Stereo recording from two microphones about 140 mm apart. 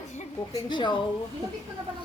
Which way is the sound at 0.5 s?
35° left (ahead or behind).